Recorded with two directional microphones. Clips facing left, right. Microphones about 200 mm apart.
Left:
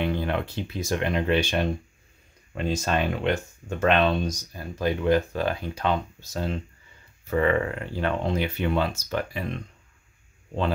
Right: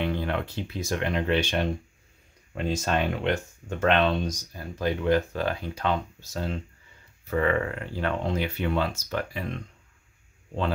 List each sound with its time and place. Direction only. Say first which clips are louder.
0.0 s speech: left 2 dB; 15° left (ahead or behind)